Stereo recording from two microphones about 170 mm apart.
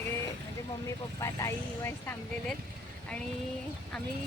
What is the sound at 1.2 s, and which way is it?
Speech, 15° left (ahead or behind).